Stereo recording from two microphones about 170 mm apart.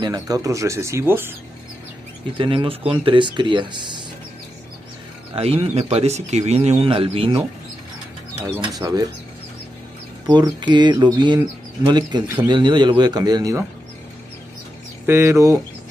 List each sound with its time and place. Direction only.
0.0 s speech: 20° right (ahead or behind)
2.3 s speech: 30° right (ahead or behind)
5.3 s speech: 35° right (ahead or behind)
10.2 s speech: 25° right (ahead or behind)
15.0 s speech: 15° right (ahead or behind)